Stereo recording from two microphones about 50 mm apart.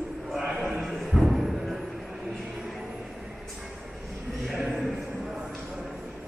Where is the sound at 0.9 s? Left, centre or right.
Centre.